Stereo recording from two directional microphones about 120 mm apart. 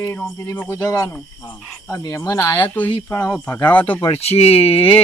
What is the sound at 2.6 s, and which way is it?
Speech, 15° left (ahead or behind).